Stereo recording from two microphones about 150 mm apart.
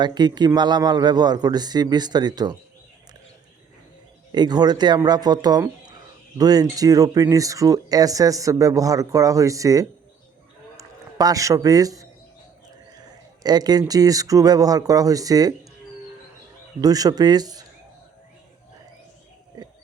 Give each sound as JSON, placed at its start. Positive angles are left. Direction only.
{"t": 0.0, "sound": "speech", "side_deg": -30}
{"t": 4.3, "sound": "speech", "side_deg": -25}
{"t": 10.8, "sound": "a sound", "side_deg": -25}
{"t": 13.4, "sound": "speech", "side_deg": -25}
{"t": 16.8, "sound": "speech", "side_deg": -25}